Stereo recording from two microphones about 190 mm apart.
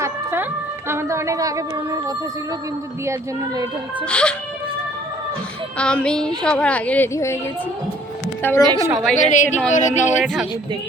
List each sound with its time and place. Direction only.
0.0 s music: 10° right (ahead or behind)
0.9 s a woman's voice: 15° right (ahead or behind)
4.0 s speech: 5° left (ahead or behind)
5.7 s a woman's voice: 5° left (ahead or behind)
8.4 s a woman's voice: 10° left (ahead or behind)
8.9 s speech: centre (ahead or behind)
9.1 s speech: 40° left (ahead or behind)